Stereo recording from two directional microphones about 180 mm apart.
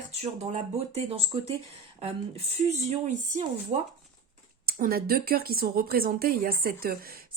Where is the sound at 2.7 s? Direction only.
40° right (ahead or behind).